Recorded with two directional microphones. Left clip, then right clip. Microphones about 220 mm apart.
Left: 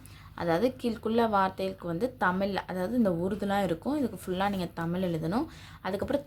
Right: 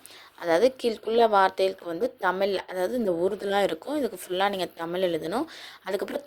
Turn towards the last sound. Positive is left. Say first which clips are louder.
# right 1 dB
turn(degrees=-25)  # may be behind; listen again after turning